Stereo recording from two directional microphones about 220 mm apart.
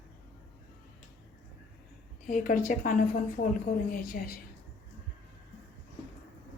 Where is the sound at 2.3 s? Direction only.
35° left (ahead or behind).